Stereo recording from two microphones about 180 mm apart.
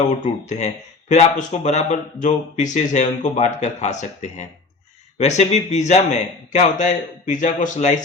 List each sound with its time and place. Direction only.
0.0 s speech: 40° left (ahead or behind)